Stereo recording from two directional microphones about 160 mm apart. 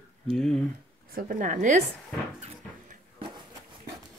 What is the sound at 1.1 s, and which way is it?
Speech, 55° right (ahead or behind).